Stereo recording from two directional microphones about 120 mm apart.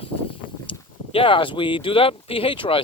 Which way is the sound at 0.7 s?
45° left (ahead or behind).